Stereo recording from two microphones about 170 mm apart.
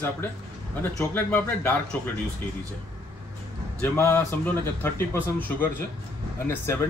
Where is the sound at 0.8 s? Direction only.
10° left (ahead or behind).